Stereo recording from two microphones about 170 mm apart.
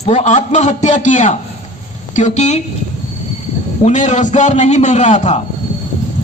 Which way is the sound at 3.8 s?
45° left (ahead or behind).